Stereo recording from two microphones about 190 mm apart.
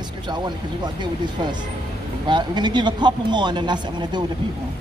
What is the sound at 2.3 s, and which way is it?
A man's voice, 25° right (ahead or behind).